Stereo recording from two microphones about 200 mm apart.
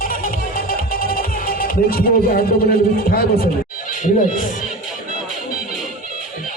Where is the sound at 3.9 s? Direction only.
45° left (ahead or behind).